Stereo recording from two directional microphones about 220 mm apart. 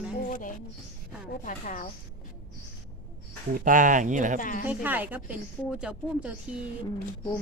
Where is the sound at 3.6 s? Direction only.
35° right (ahead or behind).